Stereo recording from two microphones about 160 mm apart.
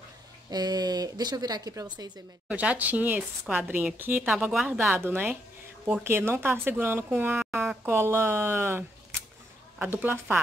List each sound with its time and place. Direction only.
0.5 s speech: 25° right (ahead or behind)
2.4 s a woman's voice: 10° right (ahead or behind)
7.3 s a woman's voice: 5° right (ahead or behind)
7.8 s a woman's voice: 15° right (ahead or behind)